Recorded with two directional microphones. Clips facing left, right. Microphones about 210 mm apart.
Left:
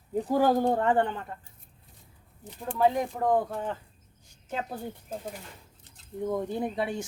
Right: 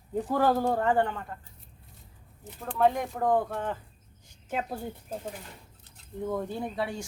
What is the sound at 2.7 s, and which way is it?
Speech, 5° left (ahead or behind).